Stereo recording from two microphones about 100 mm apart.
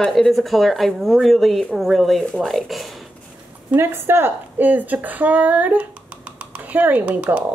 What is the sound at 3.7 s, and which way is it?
A woman's voice, 25° right (ahead or behind).